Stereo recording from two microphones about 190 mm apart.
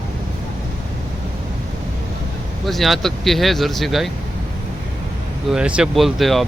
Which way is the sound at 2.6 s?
Centre (ahead or behind).